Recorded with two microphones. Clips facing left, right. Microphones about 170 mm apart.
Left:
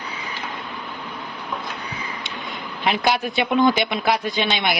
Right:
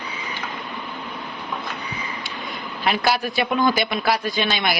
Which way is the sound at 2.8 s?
15° left (ahead or behind).